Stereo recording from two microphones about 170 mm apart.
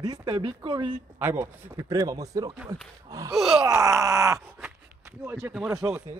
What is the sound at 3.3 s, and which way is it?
Speech, centre (ahead or behind).